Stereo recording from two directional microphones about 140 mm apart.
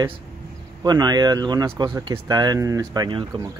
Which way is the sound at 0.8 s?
30° right (ahead or behind).